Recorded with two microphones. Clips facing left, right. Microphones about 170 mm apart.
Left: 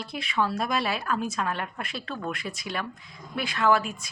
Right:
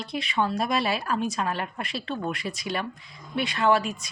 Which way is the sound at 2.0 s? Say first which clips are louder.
Right 3 dB; 25° right (ahead or behind).